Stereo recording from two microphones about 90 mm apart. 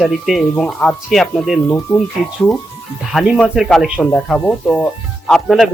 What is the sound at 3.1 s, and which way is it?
Speech, 5° right (ahead or behind).